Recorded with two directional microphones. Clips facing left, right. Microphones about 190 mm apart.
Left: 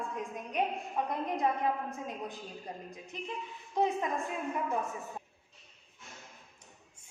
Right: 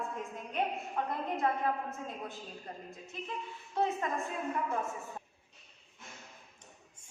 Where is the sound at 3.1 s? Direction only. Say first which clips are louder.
Left 1 dB; 15° left (ahead or behind).